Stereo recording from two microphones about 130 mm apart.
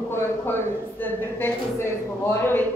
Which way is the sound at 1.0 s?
20° left (ahead or behind).